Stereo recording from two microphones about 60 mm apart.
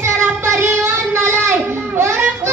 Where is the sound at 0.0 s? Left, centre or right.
Right.